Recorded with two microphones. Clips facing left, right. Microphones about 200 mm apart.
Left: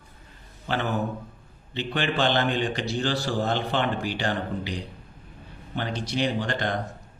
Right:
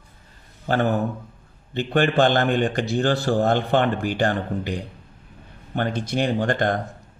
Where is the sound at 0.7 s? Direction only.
50° right (ahead or behind).